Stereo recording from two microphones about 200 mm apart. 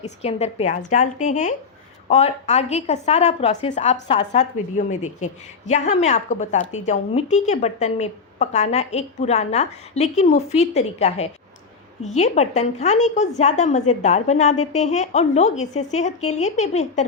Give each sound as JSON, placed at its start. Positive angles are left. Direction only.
{"t": 0.0, "sound": "a woman's voice", "side_deg": 35}